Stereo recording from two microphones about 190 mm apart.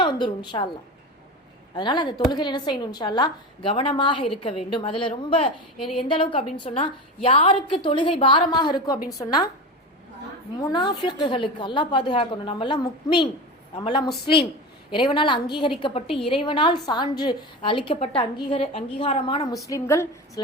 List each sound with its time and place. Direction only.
0.0 s a woman's voice: 25° left (ahead or behind)
1.7 s a woman's voice: 25° left (ahead or behind)
10.6 s a woman's voice: 20° left (ahead or behind)